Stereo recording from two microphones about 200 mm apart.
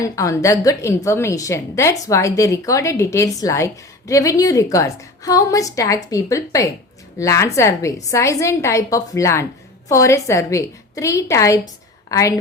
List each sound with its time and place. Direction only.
0.2 s a woman's voice: 15° left (ahead or behind)